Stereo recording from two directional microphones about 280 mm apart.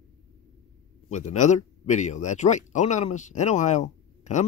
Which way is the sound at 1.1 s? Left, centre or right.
Left.